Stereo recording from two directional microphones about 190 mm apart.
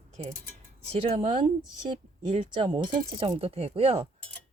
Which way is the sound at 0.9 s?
30° right (ahead or behind).